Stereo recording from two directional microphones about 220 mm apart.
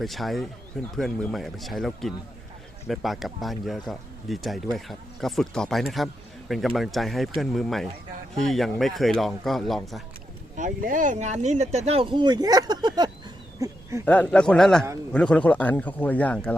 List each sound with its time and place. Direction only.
0.0 s speech: centre (ahead or behind)
10.6 s speech: 40° right (ahead or behind); by 13.1 s 20° right (ahead or behind)
13.6 s a sound: 15° right (ahead or behind)
14.0 s a man's voice: 5° left (ahead or behind)